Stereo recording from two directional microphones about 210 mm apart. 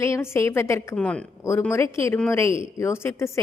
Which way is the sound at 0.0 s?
15° left (ahead or behind).